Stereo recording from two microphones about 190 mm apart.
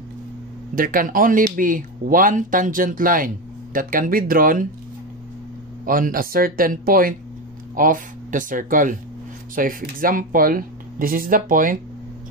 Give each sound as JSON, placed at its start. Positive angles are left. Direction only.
{"t": 0.7, "sound": "speech", "side_deg": -45}
{"t": 5.9, "sound": "speech", "side_deg": -45}